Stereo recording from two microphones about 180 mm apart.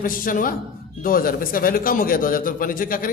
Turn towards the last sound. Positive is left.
turn(degrees=50)  # may be behind; listen again after turning